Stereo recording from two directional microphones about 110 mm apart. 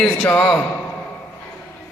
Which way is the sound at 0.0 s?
10° left (ahead or behind).